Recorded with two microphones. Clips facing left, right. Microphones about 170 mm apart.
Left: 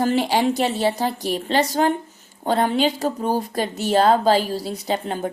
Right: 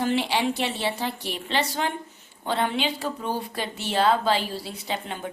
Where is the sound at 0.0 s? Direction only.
40° left (ahead or behind).